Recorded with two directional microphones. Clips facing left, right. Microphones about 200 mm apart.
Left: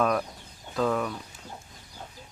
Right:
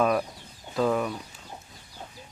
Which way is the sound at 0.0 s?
5° right (ahead or behind).